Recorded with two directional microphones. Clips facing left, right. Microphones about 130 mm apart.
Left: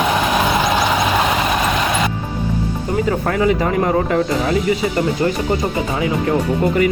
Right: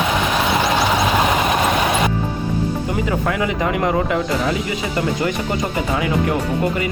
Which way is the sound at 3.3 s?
40° left (ahead or behind).